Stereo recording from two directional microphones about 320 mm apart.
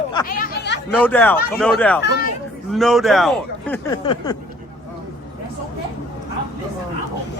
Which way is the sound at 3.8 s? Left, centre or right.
Centre.